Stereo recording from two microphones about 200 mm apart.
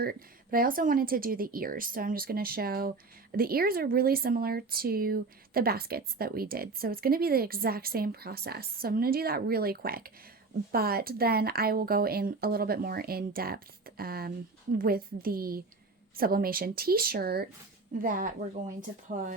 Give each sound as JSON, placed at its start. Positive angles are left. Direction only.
{"t": 0.0, "sound": "speech", "side_deg": -45}